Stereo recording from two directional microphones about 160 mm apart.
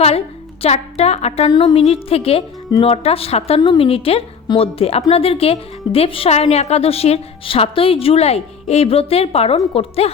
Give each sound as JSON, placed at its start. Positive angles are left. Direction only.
{"t": 0.6, "sound": "a woman's voice", "side_deg": 40}